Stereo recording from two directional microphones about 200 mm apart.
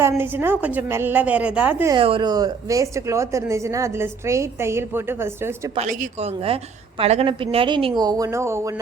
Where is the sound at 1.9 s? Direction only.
25° right (ahead or behind).